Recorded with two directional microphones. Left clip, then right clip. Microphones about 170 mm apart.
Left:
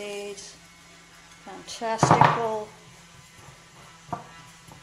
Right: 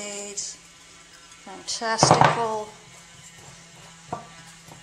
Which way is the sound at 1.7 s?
Centre (ahead or behind).